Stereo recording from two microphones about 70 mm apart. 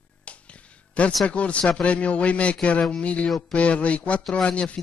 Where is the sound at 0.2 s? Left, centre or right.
Centre.